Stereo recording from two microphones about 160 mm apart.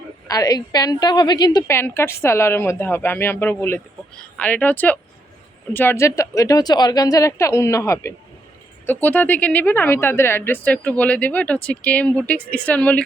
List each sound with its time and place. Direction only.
0.3 s a woman's voice: 20° left (ahead or behind)